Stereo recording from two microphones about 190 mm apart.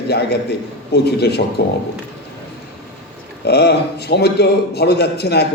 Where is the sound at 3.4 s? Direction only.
60° left (ahead or behind).